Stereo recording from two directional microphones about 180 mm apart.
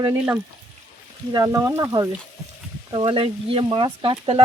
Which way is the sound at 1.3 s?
20° right (ahead or behind).